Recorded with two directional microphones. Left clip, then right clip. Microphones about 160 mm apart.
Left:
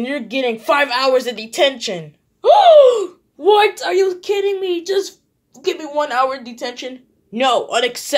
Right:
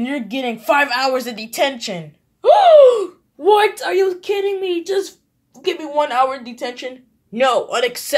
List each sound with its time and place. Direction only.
0.0 s a woman's voice: 25° left (ahead or behind)
2.4 s speech: centre (ahead or behind)